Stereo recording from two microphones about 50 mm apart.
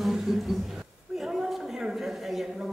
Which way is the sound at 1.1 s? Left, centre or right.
Centre.